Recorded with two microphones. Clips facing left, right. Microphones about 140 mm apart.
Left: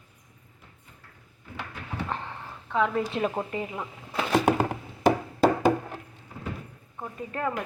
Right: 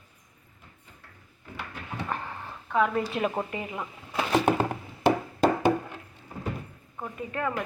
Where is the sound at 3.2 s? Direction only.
5° right (ahead or behind).